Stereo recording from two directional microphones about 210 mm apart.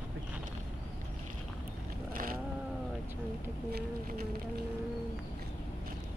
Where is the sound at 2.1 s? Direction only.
45° right (ahead or behind).